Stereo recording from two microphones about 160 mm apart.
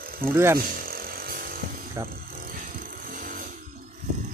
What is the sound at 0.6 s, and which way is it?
Chainsaw, 65° right (ahead or behind).